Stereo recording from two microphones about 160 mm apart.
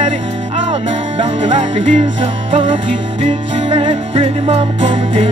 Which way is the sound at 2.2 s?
35° right (ahead or behind).